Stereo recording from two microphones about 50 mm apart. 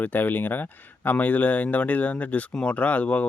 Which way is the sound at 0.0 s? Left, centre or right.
Left.